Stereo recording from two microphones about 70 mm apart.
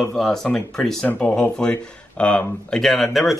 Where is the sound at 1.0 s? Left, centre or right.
Centre.